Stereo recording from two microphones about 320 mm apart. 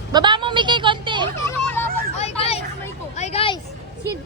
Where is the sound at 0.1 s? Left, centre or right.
Centre.